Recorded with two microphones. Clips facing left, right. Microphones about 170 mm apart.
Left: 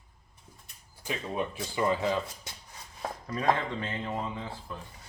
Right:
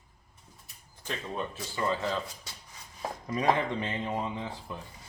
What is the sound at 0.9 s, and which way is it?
Speech, 10° left (ahead or behind).